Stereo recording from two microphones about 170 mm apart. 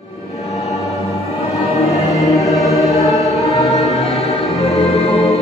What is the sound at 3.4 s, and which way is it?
Music, 40° left (ahead or behind).